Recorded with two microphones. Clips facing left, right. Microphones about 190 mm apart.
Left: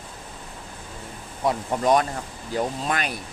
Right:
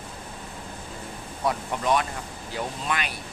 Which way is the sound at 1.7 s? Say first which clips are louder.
Left 7 dB; 40° left (ahead or behind).